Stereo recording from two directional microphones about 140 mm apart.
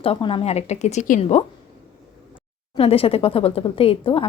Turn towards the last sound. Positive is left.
turn(degrees=40)  # may be behind; listen again after turning